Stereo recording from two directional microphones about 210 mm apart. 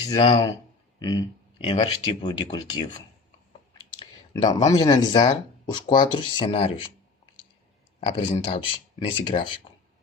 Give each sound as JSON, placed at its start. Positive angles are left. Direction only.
{"t": 0.0, "sound": "speech", "side_deg": 20}
{"t": 4.7, "sound": "speech", "side_deg": 20}
{"t": 8.0, "sound": "speech", "side_deg": 25}